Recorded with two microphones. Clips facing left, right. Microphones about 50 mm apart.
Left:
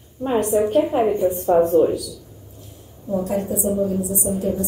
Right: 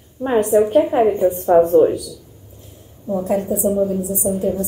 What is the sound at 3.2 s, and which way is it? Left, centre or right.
Speech, right.